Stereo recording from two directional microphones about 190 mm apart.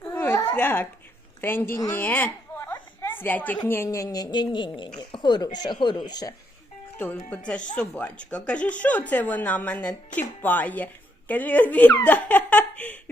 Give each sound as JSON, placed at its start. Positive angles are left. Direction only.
{"t": 0.0, "sound": "babbling", "side_deg": 10}
{"t": 1.4, "sound": "a woman's voice", "side_deg": 10}
{"t": 1.7, "sound": "a sound", "side_deg": 10}
{"t": 3.6, "sound": "a woman's voice", "side_deg": 15}
{"t": 6.9, "sound": "speech", "side_deg": 10}